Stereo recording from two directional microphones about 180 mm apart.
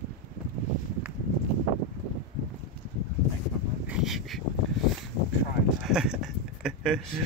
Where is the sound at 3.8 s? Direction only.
5° right (ahead or behind).